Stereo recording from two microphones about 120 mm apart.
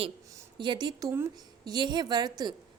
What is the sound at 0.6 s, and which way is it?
A woman's voice, 40° right (ahead or behind).